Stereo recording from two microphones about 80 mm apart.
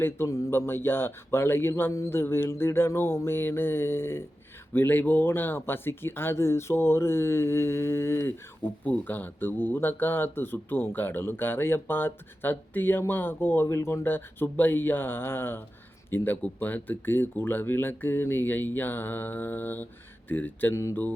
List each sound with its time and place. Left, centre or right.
0.5 s speech: left
8.6 s speech: left